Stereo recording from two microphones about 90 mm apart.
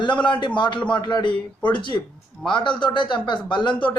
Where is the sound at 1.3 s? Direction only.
15° left (ahead or behind).